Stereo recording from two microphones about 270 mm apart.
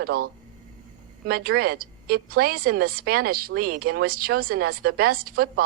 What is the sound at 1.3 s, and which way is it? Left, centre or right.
A woman's voice, right.